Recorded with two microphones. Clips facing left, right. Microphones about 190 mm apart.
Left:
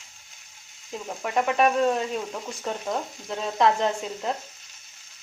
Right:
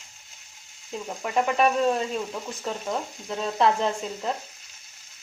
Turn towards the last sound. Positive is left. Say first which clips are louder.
# left 1 dB
turn(degrees=0)  # may be behind; listen again after turning